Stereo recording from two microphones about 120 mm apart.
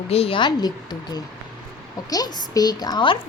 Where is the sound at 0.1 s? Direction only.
50° left (ahead or behind).